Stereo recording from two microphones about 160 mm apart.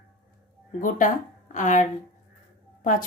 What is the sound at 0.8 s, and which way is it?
Speech, 55° left (ahead or behind).